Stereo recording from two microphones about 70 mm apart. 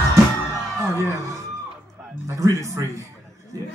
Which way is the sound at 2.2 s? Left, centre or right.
Right.